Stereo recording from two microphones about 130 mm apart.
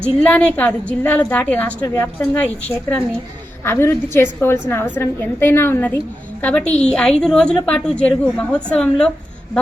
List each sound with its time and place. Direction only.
0.2 s a woman's voice: 10° left (ahead or behind)